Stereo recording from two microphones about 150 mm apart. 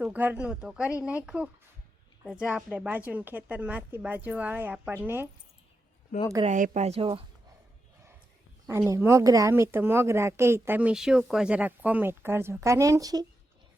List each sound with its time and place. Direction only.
0.0 s speech: 10° right (ahead or behind)
6.4 s a woman's voice: 50° right (ahead or behind)
8.9 s speech: 15° right (ahead or behind)